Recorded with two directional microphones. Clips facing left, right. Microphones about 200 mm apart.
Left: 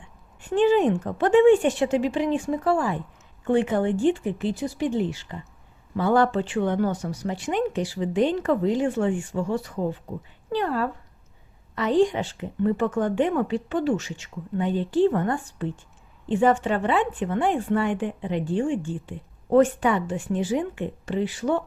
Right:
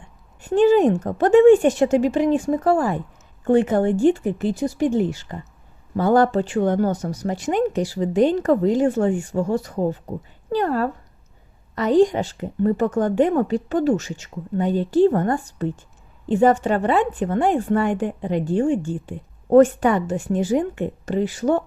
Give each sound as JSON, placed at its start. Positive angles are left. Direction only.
{"t": 0.4, "sound": "a woman's voice", "side_deg": -40}